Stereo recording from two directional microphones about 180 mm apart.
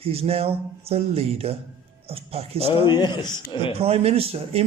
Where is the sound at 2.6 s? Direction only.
25° left (ahead or behind).